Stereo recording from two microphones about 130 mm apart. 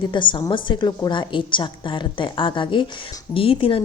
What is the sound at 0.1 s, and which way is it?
A woman's voice, 40° left (ahead or behind).